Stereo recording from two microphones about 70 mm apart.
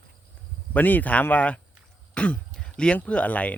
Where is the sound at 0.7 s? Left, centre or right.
Left.